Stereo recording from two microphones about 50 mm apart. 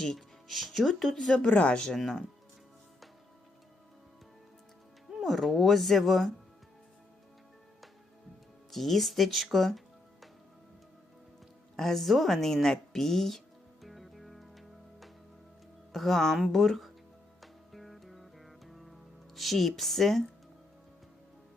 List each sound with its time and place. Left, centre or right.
0.0 s speech: centre
1.3 s speech: left
1.7 s speech: centre
2.0 s speech: centre
5.1 s speech: centre
8.7 s speech: centre
11.8 s speech: centre
13.8 s music: centre
15.9 s speech: centre
17.4 s music: centre